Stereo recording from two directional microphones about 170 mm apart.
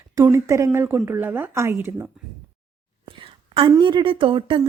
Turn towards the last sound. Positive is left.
turn(degrees=-30)  # may be behind; listen again after turning